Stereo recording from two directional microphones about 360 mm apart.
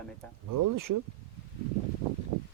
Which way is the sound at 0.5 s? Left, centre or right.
Right.